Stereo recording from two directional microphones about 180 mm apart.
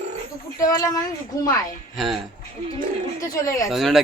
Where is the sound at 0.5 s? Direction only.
20° left (ahead or behind).